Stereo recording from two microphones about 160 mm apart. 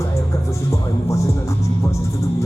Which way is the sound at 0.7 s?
20° left (ahead or behind).